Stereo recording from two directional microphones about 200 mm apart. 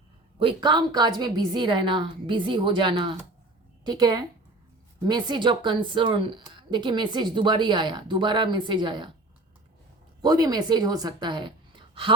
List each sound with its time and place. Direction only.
0.3 s a woman's voice: 25° right (ahead or behind)
10.2 s a woman's voice: 20° right (ahead or behind)